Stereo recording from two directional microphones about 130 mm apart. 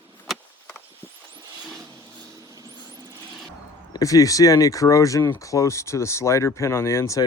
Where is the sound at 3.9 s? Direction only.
25° left (ahead or behind).